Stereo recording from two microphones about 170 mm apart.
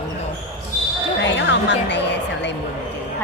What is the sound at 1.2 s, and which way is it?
A woman's voice, 90° left.